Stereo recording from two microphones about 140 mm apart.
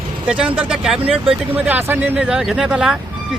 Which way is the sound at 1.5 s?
15° right (ahead or behind).